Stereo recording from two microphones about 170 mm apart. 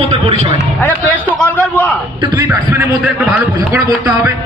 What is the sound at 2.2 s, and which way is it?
A man's voice, 15° right (ahead or behind).